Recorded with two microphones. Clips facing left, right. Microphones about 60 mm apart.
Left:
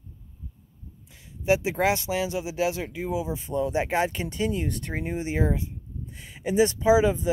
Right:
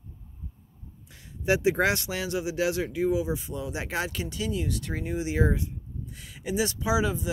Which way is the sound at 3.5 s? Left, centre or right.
Left.